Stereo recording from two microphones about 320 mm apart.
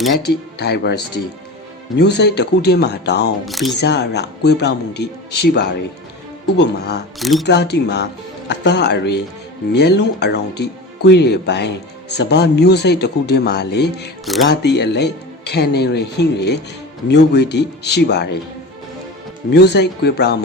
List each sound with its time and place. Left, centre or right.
0.3 s speech: left
2.0 s speech: left
3.4 s speech: centre
3.8 s speech: left
7.2 s speech: centre
7.4 s speech: left
19.5 s speech: left